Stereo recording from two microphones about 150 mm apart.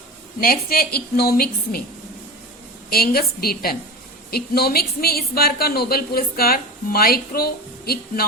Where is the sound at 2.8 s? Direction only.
90° left.